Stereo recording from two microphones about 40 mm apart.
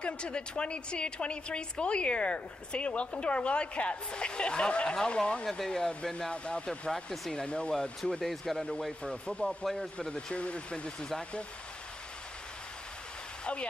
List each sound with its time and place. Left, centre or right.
0.0 s a woman's voice: left
8.2 s speech: centre
9.0 s a woman's voice: left